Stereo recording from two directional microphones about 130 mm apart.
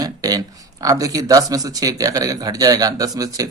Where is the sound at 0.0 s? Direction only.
30° right (ahead or behind).